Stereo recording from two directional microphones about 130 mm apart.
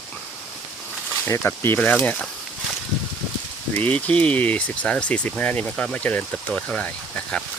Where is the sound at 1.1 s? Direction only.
15° left (ahead or behind).